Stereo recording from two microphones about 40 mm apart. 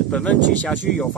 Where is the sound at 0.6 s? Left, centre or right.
Centre.